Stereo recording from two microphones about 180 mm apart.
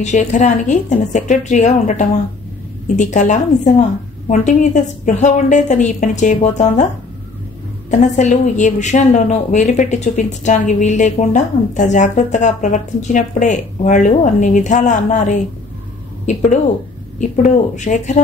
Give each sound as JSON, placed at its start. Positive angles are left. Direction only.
{"t": 0.0, "sound": "a woman's voice", "side_deg": 40}
{"t": 7.9, "sound": "a woman's voice", "side_deg": 40}
{"t": 17.4, "sound": "speech", "side_deg": 40}